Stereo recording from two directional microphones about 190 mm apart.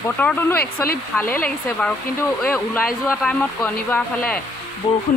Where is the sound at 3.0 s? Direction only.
10° left (ahead or behind).